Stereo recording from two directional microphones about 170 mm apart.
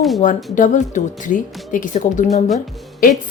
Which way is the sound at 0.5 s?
45° left (ahead or behind).